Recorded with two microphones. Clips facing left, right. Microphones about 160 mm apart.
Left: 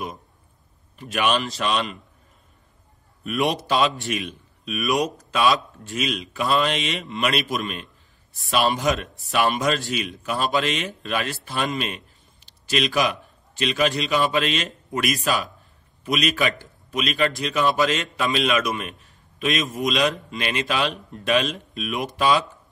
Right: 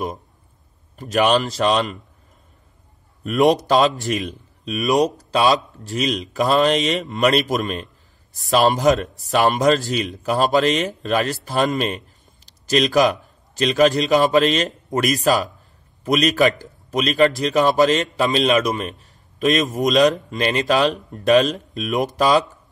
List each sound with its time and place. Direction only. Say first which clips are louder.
0.9 s speech: right 6 dB; 40° right (ahead or behind)
3.3 s a man's voice: right 7 dB; 40° right (ahead or behind)